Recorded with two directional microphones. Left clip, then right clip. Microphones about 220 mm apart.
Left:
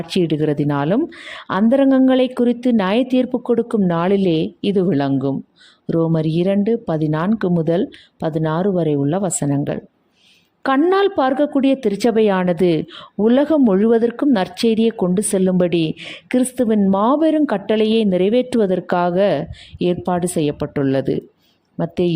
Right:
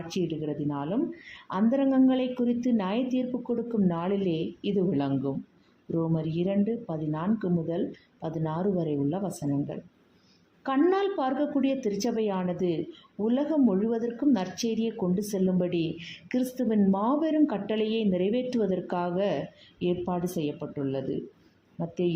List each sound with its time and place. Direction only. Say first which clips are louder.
0.1 s a woman's voice: left 13 dB; 45° left (ahead or behind)